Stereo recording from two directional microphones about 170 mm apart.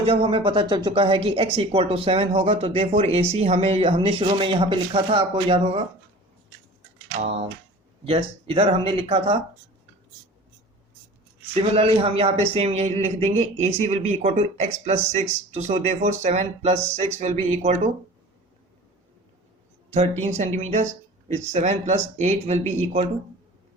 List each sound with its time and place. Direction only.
0.0 s speech: 35° right (ahead or behind)
8.0 s speech: 35° right (ahead or behind)
11.5 s speech: 35° right (ahead or behind)
19.9 s speech: 40° right (ahead or behind)